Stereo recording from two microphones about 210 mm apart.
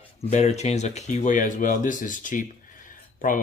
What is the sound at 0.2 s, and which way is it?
Speech, 35° left (ahead or behind).